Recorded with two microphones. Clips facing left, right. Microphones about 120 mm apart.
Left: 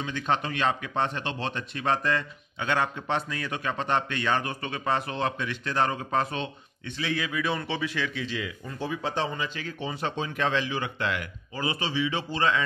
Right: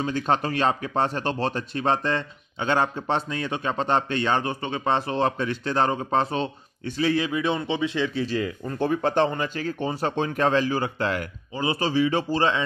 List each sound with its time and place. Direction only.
0.0 s speech: 40° right (ahead or behind); by 9.5 s 55° right (ahead or behind)
9.6 s a man's voice: 45° right (ahead or behind)
11.5 s speech: 25° right (ahead or behind)
11.8 s a man's voice: 45° right (ahead or behind)
12.4 s speech: 25° right (ahead or behind)